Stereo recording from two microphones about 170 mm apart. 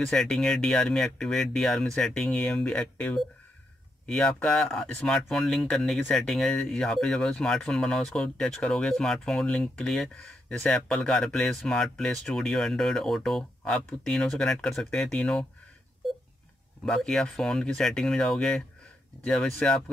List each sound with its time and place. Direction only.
0.0 s speech: 5° left (ahead or behind)
16.8 s speech: 5° left (ahead or behind)